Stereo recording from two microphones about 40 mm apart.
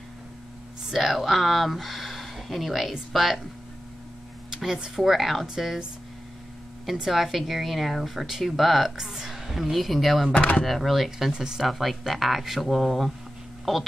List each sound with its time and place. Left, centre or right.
0.9 s speech: centre
4.9 s speech: centre
6.9 s speech: centre
8.9 s speech: centre
10.3 s speech: left
10.6 s speech: centre
11.3 s speech: centre
11.6 s speech: centre